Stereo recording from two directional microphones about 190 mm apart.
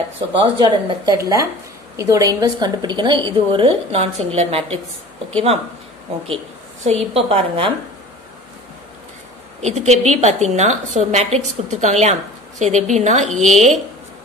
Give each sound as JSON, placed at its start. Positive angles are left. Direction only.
{"t": 0.4, "sound": "a woman's voice", "side_deg": -25}
{"t": 6.2, "sound": "a woman's voice", "side_deg": -30}
{"t": 9.6, "sound": "a woman's voice", "side_deg": -35}